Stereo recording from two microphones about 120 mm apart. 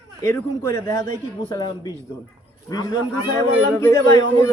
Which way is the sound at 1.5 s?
35° left (ahead or behind).